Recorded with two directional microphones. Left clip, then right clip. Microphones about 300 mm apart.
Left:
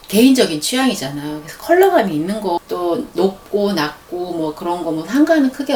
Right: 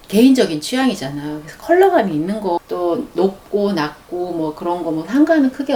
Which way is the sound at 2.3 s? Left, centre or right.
Centre.